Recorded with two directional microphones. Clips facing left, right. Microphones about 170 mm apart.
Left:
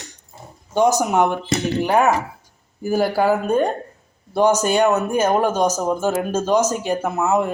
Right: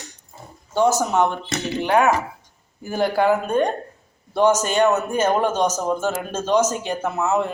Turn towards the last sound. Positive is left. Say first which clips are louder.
# left 2 dB
turn(degrees=10)  # may be behind; listen again after turning